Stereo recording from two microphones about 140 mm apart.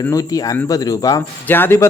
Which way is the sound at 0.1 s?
25° left (ahead or behind).